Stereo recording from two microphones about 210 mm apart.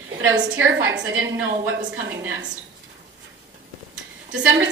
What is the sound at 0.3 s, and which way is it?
Speech, 65° right (ahead or behind).